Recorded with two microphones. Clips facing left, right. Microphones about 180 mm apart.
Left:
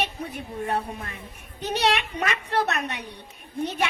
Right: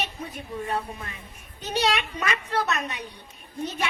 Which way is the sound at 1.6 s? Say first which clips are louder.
Left 1 dB; 65° left (ahead or behind).